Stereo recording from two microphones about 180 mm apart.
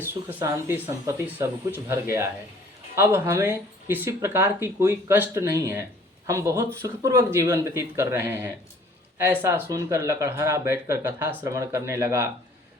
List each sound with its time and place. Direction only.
0.0 s speech: 10° right (ahead or behind)